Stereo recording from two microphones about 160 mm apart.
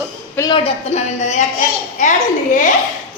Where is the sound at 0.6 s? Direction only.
45° left (ahead or behind).